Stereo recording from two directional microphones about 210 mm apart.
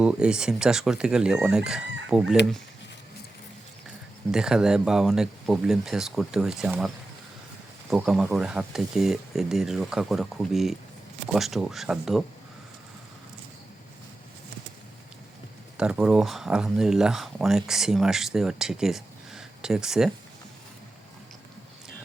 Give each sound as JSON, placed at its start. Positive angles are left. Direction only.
{"t": 0.0, "sound": "speech", "side_deg": -5}
{"t": 4.3, "sound": "speech", "side_deg": -5}
{"t": 15.8, "sound": "speech", "side_deg": -5}